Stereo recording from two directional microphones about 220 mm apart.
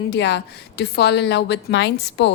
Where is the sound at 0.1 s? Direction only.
50° left (ahead or behind).